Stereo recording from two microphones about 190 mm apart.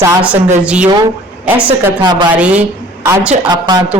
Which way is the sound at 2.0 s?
20° right (ahead or behind).